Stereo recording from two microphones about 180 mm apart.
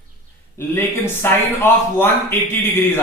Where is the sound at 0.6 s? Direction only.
15° left (ahead or behind).